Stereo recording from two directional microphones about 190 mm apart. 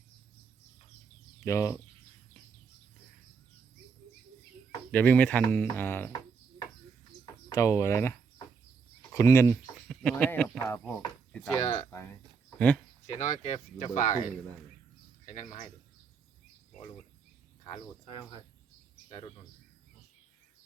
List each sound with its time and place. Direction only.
1.5 s speech: 15° left (ahead or behind)
4.9 s speech: 10° left (ahead or behind)
7.5 s speech: 15° left (ahead or behind)
9.0 s a sound: 15° left (ahead or behind)
9.7 s speech: 5° left (ahead or behind)
10.6 s speech: 15° left (ahead or behind)
11.6 s speech: 30° left (ahead or behind)
12.5 s speech: 5° left (ahead or behind)
13.1 s speech: 35° left (ahead or behind)
15.3 s a man's voice: 40° left (ahead or behind)
17.6 s speech: 30° left (ahead or behind)